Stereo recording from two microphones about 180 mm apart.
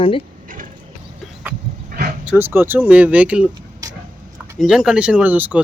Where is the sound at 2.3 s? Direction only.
10° right (ahead or behind).